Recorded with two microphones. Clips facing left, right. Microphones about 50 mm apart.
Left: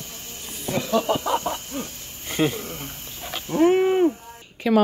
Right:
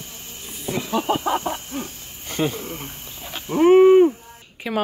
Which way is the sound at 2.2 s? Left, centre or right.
Centre.